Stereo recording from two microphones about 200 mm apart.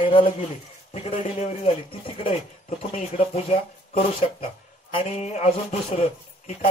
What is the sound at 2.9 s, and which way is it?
Speech, 30° left (ahead or behind).